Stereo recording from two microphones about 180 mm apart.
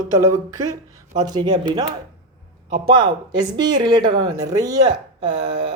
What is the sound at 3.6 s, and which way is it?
A man's voice, 25° right (ahead or behind).